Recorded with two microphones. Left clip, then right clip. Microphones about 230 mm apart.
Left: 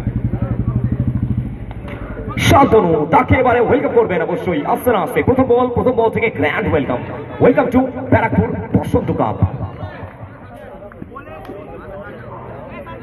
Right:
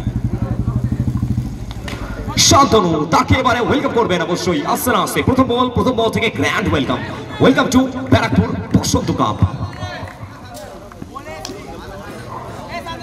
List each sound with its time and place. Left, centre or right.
2.3 s a man's voice: right